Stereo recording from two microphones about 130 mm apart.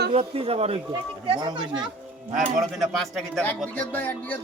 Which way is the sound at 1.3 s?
35° right (ahead or behind).